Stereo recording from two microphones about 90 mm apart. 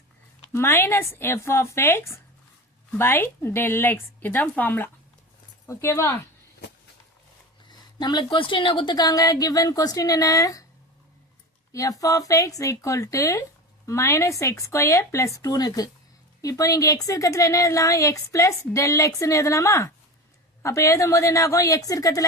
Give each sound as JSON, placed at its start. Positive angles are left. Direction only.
{"t": 0.5, "sound": "speech", "side_deg": 25}
{"t": 5.6, "sound": "a woman's voice", "side_deg": 30}
{"t": 7.7, "sound": "a woman's voice", "side_deg": 55}
{"t": 11.7, "sound": "a woman's voice", "side_deg": 40}